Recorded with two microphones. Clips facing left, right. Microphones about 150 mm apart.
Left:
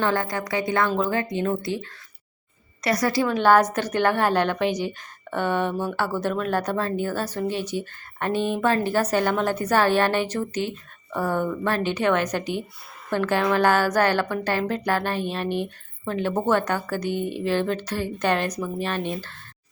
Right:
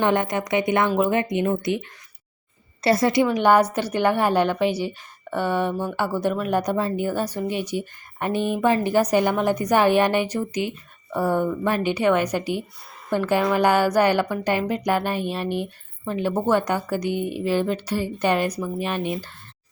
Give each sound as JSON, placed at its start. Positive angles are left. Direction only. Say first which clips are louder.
{"t": 0.0, "sound": "speech", "louder": "right 3 dB", "side_deg": -20}